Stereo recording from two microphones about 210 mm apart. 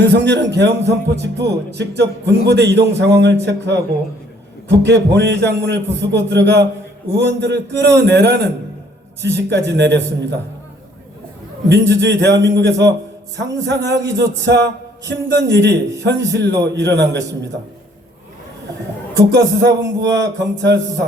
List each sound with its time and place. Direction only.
0.0 s speech: 55° right (ahead or behind)
11.7 s speech: 55° right (ahead or behind)
19.3 s speech: 55° right (ahead or behind)